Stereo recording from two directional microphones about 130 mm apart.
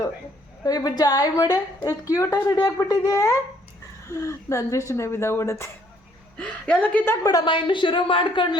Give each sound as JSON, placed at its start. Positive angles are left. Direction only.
{"t": 0.6, "sound": "a woman's voice", "side_deg": 30}
{"t": 6.3, "sound": "a woman's voice", "side_deg": 10}
{"t": 7.3, "sound": "a woman's voice", "side_deg": 35}